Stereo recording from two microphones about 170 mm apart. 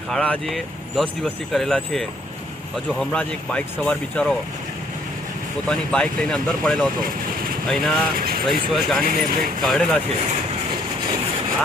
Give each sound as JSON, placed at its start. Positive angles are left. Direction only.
{"t": 0.1, "sound": "speech", "side_deg": 5}
{"t": 5.6, "sound": "speech", "side_deg": 5}
{"t": 9.0, "sound": "speech", "side_deg": -55}
{"t": 9.6, "sound": "speech", "side_deg": 0}